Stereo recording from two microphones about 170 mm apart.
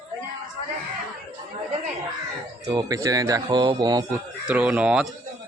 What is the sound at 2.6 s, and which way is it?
Speech, 20° right (ahead or behind).